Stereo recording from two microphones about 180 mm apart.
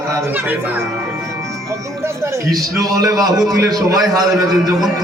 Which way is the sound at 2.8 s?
20° right (ahead or behind).